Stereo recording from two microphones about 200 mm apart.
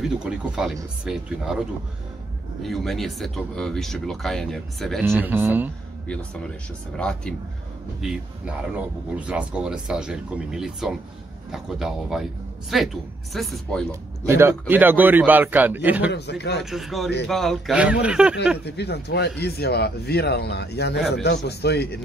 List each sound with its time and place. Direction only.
0.0 s speech: centre (ahead or behind)
2.6 s speech: centre (ahead or behind)
5.0 s a man's voice: 10° right (ahead or behind)
7.0 s speech: 5° left (ahead or behind)
14.2 s a man's voice: 10° right (ahead or behind)
16.1 s speech: 55° left (ahead or behind)
16.7 s speech: centre (ahead or behind)
18.7 s speech: 55° left (ahead or behind)